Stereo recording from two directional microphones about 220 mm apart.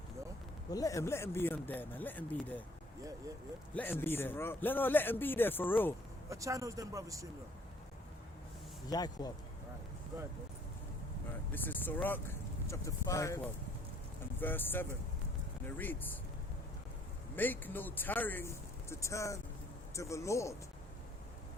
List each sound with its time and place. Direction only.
0.7 s speech: 15° left (ahead or behind)
3.8 s speech: 10° left (ahead or behind)
6.3 s speech: 15° right (ahead or behind)
8.9 s speech: 15° left (ahead or behind)
11.5 s speech: 10° left (ahead or behind)
17.3 s speech: 10° left (ahead or behind)